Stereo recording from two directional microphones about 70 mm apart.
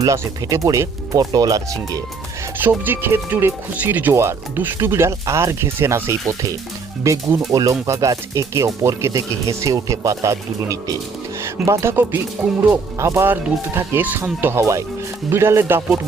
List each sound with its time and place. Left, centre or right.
0.0 s speech: right
2.6 s speech: right
4.1 s speech: right
7.5 s speech: right
11.4 s speech: right
13.2 s speech: right
14.4 s speech: right